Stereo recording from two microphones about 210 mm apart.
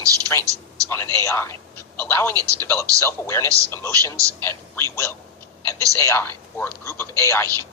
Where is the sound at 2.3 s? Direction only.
15° right (ahead or behind).